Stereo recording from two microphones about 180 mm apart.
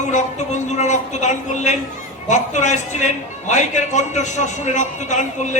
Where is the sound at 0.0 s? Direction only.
40° left (ahead or behind).